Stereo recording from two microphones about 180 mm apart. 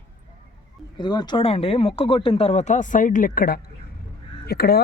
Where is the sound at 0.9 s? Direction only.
25° left (ahead or behind).